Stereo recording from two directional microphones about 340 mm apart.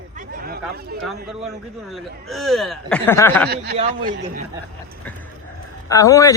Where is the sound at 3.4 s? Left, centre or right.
Right.